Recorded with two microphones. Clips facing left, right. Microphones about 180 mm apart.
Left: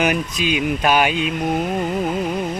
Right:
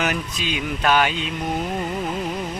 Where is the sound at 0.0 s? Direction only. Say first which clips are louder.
Left 5 dB; 15° left (ahead or behind).